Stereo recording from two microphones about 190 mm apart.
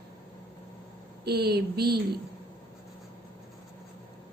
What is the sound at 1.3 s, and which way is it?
Speech, 60° right (ahead or behind).